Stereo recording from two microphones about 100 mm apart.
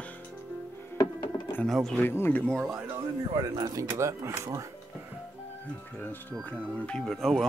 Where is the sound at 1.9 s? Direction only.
20° left (ahead or behind).